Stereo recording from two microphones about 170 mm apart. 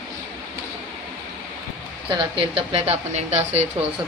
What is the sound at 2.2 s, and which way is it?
Speech, 35° right (ahead or behind).